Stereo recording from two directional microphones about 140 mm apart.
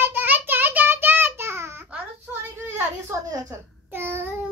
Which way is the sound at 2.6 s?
20° right (ahead or behind).